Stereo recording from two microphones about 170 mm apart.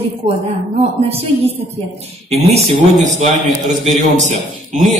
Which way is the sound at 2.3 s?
40° right (ahead or behind).